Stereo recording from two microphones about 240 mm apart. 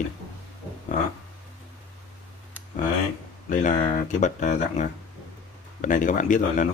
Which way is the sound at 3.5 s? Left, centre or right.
Left.